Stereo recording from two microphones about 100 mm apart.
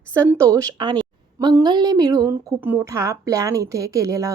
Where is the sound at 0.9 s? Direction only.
45° right (ahead or behind).